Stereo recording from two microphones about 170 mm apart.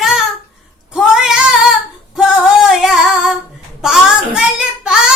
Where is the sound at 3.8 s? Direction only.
5° right (ahead or behind).